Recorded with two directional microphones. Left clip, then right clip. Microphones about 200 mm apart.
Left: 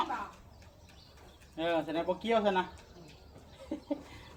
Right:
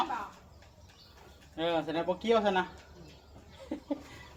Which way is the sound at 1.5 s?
30° right (ahead or behind).